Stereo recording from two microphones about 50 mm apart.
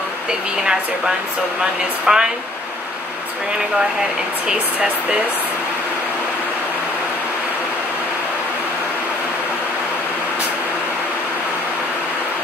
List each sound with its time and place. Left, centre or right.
0.3 s a woman's voice: centre